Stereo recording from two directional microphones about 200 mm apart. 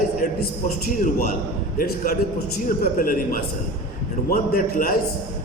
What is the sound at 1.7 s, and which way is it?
A man's voice, 45° left (ahead or behind).